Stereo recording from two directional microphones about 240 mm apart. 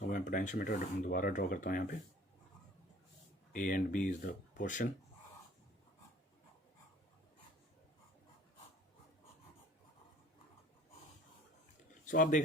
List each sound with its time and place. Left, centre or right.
0.1 s speech: left
3.5 s speech: left
12.0 s speech: left